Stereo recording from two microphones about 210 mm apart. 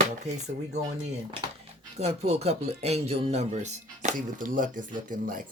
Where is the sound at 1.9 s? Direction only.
30° right (ahead or behind).